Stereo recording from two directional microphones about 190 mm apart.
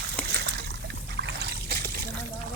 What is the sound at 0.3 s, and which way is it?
Trickle, 60° right (ahead or behind).